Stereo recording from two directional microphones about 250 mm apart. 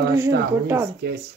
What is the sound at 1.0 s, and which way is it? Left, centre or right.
Speech, right.